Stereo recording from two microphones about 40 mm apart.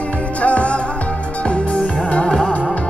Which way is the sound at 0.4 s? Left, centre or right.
Left.